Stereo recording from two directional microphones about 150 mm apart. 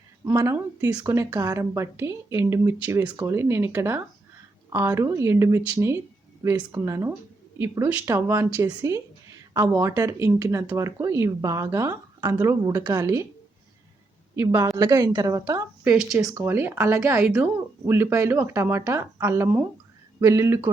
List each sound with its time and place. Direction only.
0.3 s speech: 15° right (ahead or behind)
14.8 s speech: 25° right (ahead or behind)
15.8 s speech: 5° right (ahead or behind)
16.3 s speech: 15° right (ahead or behind)